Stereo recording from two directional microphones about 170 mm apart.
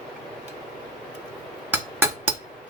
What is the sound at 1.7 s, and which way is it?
Music, 15° right (ahead or behind).